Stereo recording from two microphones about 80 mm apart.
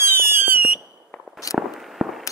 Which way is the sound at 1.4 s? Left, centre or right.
Left.